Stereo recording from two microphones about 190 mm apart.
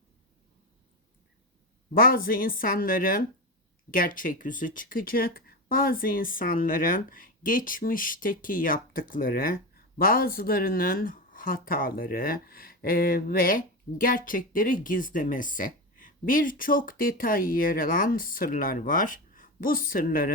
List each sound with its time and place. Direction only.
1.9 s speech: 50° left (ahead or behind)